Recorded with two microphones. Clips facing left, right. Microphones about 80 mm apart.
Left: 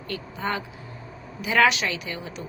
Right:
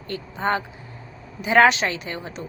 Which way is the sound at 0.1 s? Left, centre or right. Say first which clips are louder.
Right 5 dB; right.